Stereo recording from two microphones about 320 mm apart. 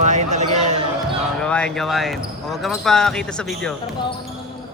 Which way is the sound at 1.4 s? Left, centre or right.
Centre.